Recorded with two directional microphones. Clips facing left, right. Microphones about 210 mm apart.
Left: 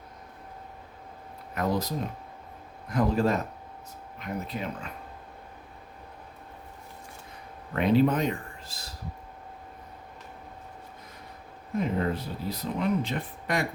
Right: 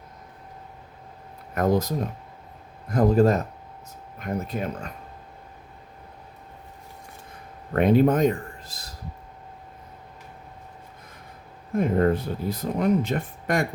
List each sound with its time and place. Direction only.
1.5 s speech: 50° right (ahead or behind)
2.9 s speech: 40° right (ahead or behind)
7.7 s speech: 50° right (ahead or behind)
11.8 s speech: 50° right (ahead or behind)